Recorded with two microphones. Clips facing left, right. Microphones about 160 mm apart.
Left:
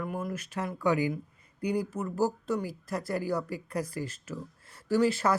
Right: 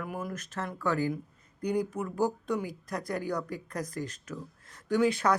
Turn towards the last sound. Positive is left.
turn(degrees=5)  # may be behind; listen again after turning